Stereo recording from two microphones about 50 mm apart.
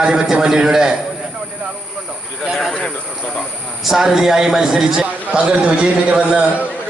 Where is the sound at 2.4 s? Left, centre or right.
Centre.